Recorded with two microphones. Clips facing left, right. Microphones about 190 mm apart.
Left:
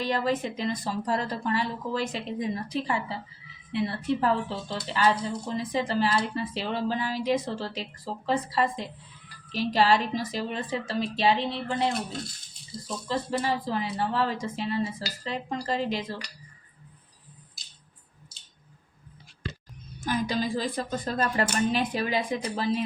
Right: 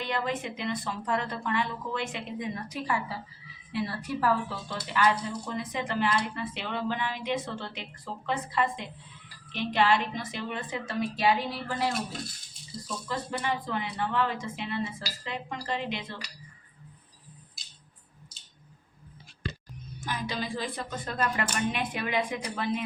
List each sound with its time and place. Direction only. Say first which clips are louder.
0.0 s a woman's voice: left 4 dB; 35° left (ahead or behind)
13.1 s speech: left 4 dB; 35° left (ahead or behind)
20.1 s speech: left 6 dB; 40° left (ahead or behind)